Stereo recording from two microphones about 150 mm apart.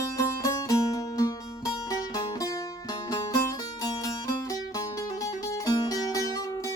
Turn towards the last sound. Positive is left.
turn(degrees=20)  # may be behind; listen again after turning